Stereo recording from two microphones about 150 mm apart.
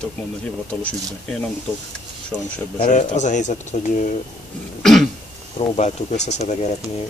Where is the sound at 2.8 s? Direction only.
55° left (ahead or behind).